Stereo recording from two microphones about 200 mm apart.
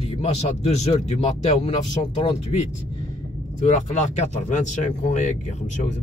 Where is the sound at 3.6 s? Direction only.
35° left (ahead or behind).